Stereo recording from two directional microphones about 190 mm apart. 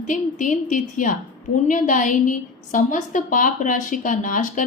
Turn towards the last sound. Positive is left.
turn(degrees=45)  # may be behind; listen again after turning